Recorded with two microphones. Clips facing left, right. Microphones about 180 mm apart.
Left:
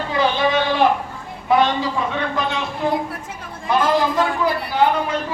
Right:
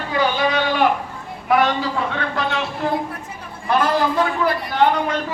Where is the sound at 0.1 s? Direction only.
25° left (ahead or behind).